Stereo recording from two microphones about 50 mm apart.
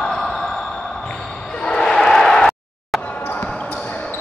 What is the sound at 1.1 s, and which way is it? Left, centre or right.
Basketball bounce, centre.